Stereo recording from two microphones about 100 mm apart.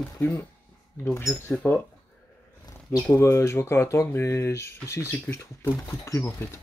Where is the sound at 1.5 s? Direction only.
15° left (ahead or behind).